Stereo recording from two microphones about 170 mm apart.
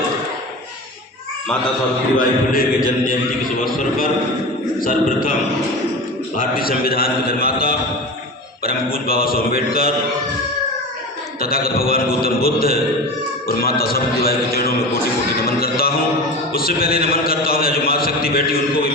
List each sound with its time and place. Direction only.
2.1 s a man's voice: 60° left (ahead or behind)
4.8 s a man's voice: 55° left (ahead or behind)
6.3 s a man's voice: 55° left (ahead or behind)
11.3 s a man's voice: 60° left (ahead or behind)